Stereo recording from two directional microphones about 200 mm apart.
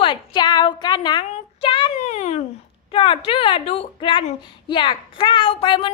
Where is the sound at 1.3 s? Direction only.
25° left (ahead or behind).